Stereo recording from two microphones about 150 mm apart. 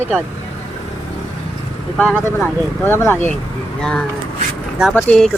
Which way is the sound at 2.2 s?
15° left (ahead or behind).